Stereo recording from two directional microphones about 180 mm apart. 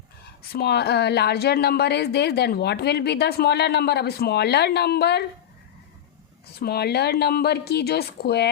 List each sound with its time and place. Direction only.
0.5 s speech: 65° left (ahead or behind)
6.6 s speech: 60° left (ahead or behind)